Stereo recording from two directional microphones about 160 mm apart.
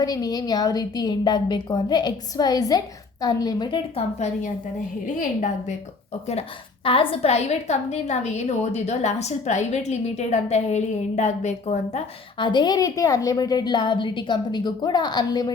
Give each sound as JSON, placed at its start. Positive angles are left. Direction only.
{"t": 0.0, "sound": "a woman's voice", "side_deg": 25}
{"t": 5.0, "sound": "a woman's voice", "side_deg": 50}
{"t": 6.8, "sound": "a woman's voice", "side_deg": 35}
{"t": 12.4, "sound": "a woman's voice", "side_deg": 30}